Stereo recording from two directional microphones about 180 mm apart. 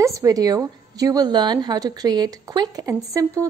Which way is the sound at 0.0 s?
20° right (ahead or behind).